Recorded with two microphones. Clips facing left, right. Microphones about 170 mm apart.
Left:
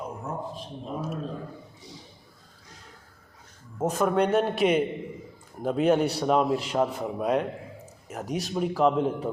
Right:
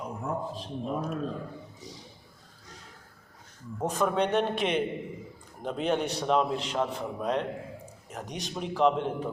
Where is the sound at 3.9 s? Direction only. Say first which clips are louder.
Left 3 dB; 5° left (ahead or behind).